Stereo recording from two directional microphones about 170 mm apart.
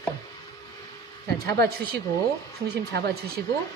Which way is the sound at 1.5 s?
70° right (ahead or behind).